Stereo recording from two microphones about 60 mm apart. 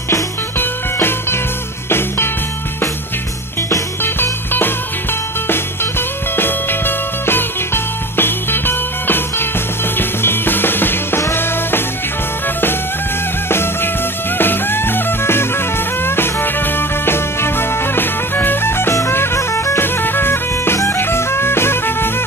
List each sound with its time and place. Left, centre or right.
0.6 s music: left
4.0 s music: left
14.4 s music: left
19.8 s music: left